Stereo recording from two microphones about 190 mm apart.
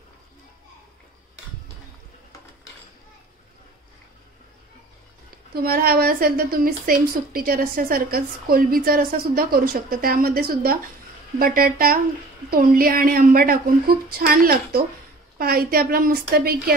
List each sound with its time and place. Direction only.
5.5 s a woman's voice: 50° right (ahead or behind)